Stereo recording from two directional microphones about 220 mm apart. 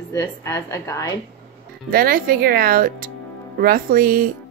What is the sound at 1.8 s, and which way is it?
A woman's voice, 40° right (ahead or behind).